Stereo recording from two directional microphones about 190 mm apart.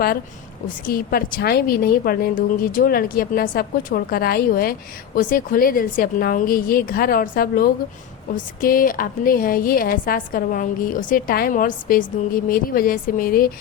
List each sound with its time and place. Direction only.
0.9 s a woman's voice: 50° left (ahead or behind)